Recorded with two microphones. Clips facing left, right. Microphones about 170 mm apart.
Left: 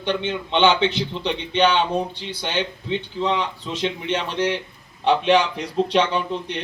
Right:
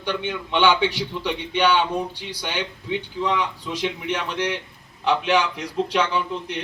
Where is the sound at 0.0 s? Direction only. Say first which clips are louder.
Left 3 dB; 25° left (ahead or behind).